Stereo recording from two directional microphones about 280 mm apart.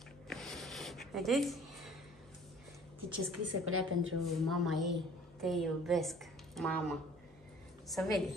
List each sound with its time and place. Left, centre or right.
0.3 s a sound: centre
3.1 s a woman's voice: right
4.4 s a woman's voice: centre